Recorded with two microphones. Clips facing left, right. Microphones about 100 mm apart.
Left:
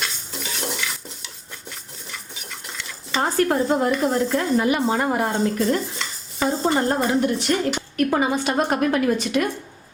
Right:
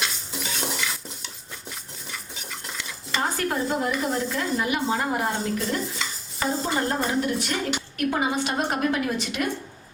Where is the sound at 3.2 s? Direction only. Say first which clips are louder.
Left 6 dB; 40° left (ahead or behind).